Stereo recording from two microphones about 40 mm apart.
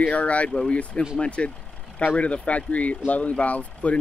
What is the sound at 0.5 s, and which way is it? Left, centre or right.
Speech, left.